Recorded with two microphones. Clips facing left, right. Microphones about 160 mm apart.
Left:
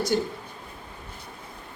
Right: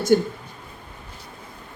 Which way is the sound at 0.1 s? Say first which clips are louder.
Right 9 dB; 50° right (ahead or behind).